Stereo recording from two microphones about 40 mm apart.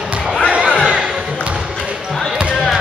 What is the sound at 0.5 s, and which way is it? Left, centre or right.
Crowd, right.